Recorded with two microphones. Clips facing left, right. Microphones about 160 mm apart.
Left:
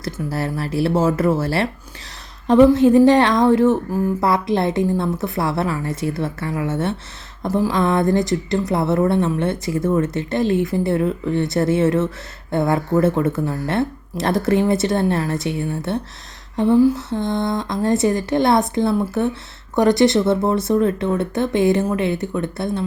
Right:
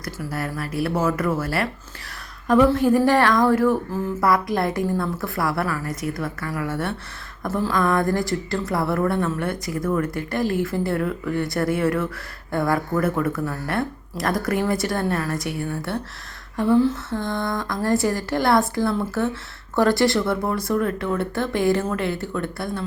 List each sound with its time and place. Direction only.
0.0 s a woman's voice: 30° left (ahead or behind)